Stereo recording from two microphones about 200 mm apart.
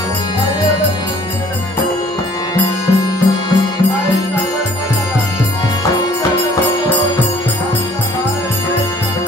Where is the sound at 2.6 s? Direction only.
20° left (ahead or behind).